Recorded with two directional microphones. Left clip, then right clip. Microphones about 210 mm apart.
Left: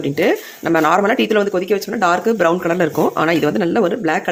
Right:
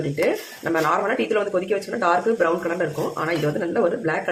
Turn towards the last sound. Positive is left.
turn(degrees=50)  # may be behind; listen again after turning